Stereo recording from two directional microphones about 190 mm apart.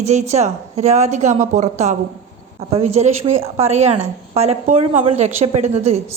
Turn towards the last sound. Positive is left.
turn(degrees=-35)  # may be behind; listen again after turning